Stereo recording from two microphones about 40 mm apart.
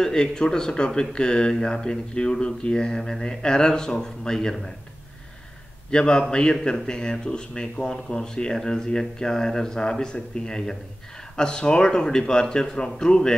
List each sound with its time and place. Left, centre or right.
0.0 s speech: centre
5.9 s speech: left